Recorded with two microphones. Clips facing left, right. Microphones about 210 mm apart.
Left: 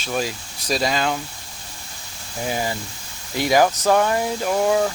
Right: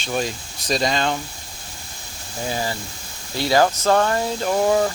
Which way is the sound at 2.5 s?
15° left (ahead or behind).